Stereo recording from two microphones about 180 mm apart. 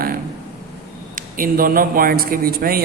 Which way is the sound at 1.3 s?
50° right (ahead or behind).